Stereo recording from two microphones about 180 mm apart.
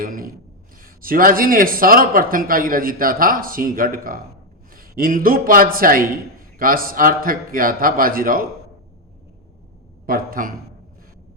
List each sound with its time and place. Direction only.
0.0 s a man's voice: 50° right (ahead or behind)
10.1 s a man's voice: 50° right (ahead or behind)